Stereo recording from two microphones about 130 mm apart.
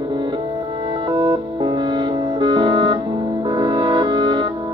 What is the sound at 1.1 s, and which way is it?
Music, 40° right (ahead or behind).